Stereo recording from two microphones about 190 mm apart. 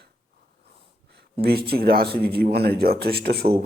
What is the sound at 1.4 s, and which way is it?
Speech, 55° right (ahead or behind).